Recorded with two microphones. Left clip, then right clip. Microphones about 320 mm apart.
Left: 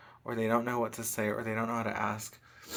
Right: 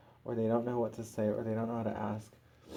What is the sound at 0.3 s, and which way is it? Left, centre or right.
Speech, left.